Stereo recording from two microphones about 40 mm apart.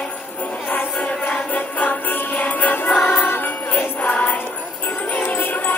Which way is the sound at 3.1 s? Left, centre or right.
Left.